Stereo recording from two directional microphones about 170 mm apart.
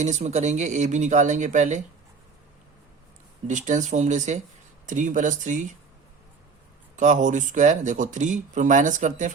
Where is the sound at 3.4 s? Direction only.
45° right (ahead or behind).